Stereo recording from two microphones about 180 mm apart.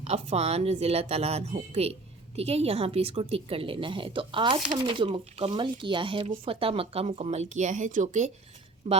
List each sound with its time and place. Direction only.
0.0 s speech: 35° right (ahead or behind)
8.9 s speech: 30° right (ahead or behind)